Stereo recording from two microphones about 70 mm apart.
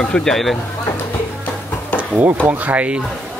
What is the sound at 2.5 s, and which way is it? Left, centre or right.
Speech, right.